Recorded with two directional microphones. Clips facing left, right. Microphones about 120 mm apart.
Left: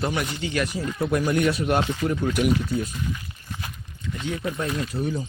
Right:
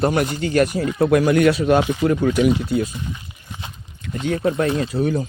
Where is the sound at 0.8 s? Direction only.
85° right.